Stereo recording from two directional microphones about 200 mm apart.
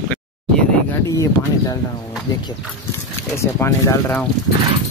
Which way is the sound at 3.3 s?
15° left (ahead or behind).